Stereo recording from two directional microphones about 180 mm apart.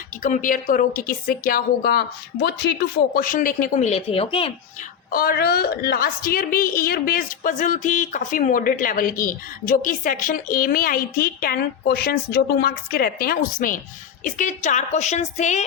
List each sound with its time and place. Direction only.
0.2 s a woman's voice: 45° left (ahead or behind); by 4.5 s 30° left (ahead or behind)
5.1 s a woman's voice: 55° left (ahead or behind); by 15.6 s 40° left (ahead or behind)